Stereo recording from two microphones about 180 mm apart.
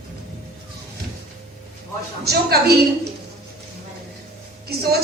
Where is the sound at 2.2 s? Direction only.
60° right (ahead or behind).